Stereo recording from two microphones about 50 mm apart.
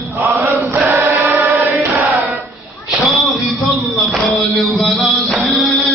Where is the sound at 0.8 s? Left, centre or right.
Right.